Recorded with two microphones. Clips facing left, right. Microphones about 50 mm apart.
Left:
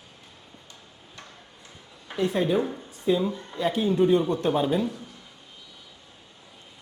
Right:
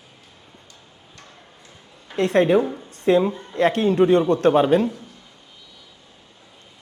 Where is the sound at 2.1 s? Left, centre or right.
Right.